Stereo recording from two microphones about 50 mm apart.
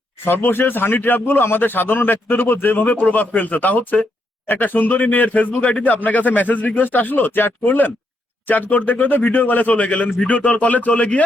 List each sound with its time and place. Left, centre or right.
0.3 s a man's voice: left
2.9 s speech: left